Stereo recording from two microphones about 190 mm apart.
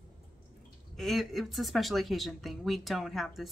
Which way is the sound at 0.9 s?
Centre (ahead or behind).